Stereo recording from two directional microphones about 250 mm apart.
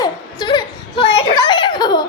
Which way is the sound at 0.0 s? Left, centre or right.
Centre.